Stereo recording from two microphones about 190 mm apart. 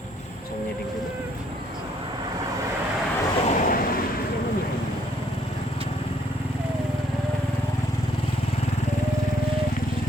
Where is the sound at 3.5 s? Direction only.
45° left (ahead or behind).